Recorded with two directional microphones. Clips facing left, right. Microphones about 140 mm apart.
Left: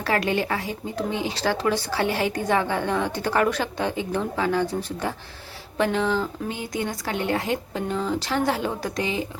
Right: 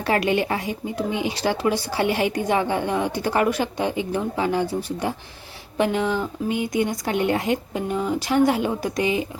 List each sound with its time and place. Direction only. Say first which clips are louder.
0.0 s speech: right 3 dB; 20° right (ahead or behind)